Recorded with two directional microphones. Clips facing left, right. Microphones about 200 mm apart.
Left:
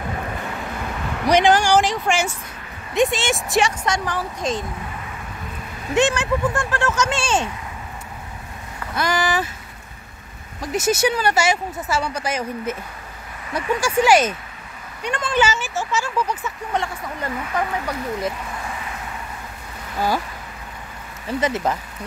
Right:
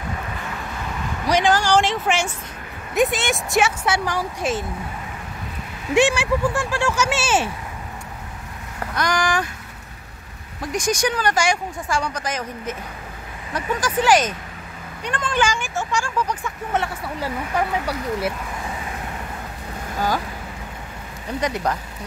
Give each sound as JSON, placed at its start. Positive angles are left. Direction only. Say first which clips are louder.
{"t": 1.3, "sound": "speech", "louder": "left 3 dB", "side_deg": 20}
{"t": 1.8, "sound": "speech", "louder": "left 1 dB", "side_deg": 0}
{"t": 5.9, "sound": "speech", "louder": "right 1 dB", "side_deg": -10}
{"t": 8.9, "sound": "speech", "louder": "left 1 dB", "side_deg": 5}
{"t": 10.6, "sound": "speech", "louder": "left 2 dB", "side_deg": 5}
{"t": 16.7, "sound": "speech", "louder": "right 1 dB", "side_deg": -5}
{"t": 21.3, "sound": "speech", "louder": "left 2 dB", "side_deg": 5}